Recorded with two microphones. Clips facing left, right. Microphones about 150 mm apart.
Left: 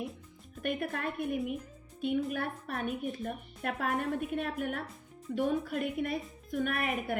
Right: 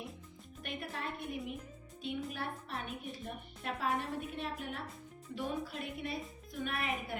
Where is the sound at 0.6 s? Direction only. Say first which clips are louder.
Left 8 dB; 55° left (ahead or behind).